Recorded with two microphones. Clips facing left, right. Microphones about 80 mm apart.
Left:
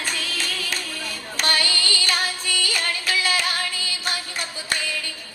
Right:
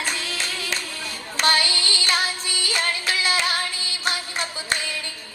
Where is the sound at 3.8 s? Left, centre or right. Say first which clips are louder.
Right 1 dB; left.